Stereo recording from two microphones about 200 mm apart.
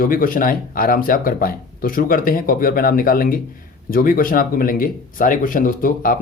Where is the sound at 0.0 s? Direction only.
45° left (ahead or behind).